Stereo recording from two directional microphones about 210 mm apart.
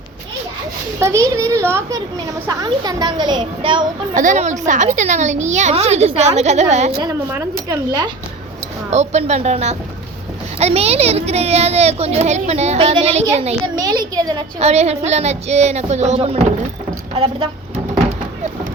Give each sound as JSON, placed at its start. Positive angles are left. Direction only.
{"t": 0.9, "sound": "a child's voice", "side_deg": -15}
{"t": 4.1, "sound": "a woman's voice", "side_deg": -40}
{"t": 7.0, "sound": "a child's voice", "side_deg": -15}
{"t": 8.9, "sound": "a woman's voice", "side_deg": -30}
{"t": 13.7, "sound": "a child's voice", "side_deg": -15}
{"t": 14.6, "sound": "a woman's voice", "side_deg": -30}